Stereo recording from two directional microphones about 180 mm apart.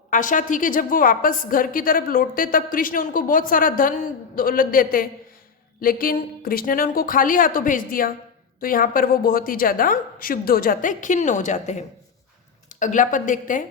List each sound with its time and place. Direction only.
0.1 s a woman's voice: 45° left (ahead or behind)